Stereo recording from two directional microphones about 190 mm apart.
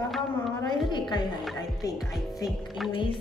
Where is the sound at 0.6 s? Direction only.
25° left (ahead or behind).